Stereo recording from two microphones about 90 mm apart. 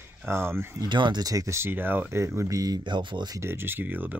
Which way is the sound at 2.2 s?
35° right (ahead or behind).